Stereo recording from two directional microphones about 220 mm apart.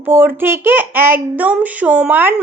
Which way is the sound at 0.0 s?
10° right (ahead or behind).